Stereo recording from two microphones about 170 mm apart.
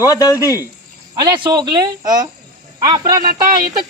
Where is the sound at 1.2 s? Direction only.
25° right (ahead or behind).